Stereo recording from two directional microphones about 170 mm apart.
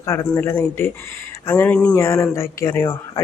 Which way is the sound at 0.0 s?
15° left (ahead or behind).